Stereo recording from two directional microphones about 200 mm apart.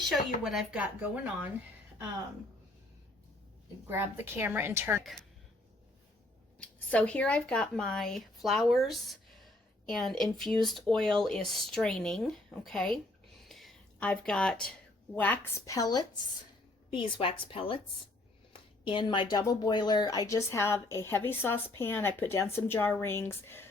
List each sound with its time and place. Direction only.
0.4 s a woman's voice: 5° right (ahead or behind)
3.8 s a woman's voice: 10° right (ahead or behind)
6.6 s speech: 5° left (ahead or behind)
13.5 s a sound: centre (ahead or behind)
15.1 s a woman's voice: 10° left (ahead or behind)